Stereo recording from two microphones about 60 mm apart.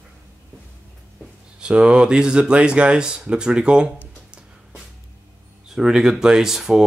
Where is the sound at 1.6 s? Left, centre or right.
Centre.